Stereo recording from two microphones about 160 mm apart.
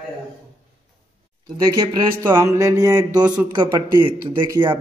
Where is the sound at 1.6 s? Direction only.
25° right (ahead or behind).